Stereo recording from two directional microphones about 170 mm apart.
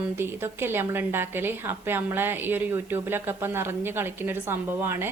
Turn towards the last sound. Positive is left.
turn(degrees=-15)  # may be behind; listen again after turning